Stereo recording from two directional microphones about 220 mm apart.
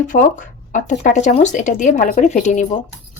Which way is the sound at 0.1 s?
35° left (ahead or behind).